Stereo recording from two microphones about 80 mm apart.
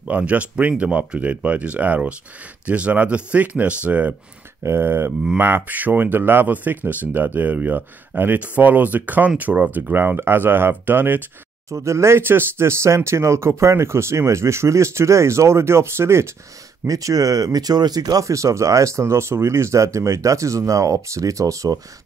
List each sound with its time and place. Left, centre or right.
0.1 s speech: centre
4.6 s speech: right
11.7 s speech: right
16.8 s speech: right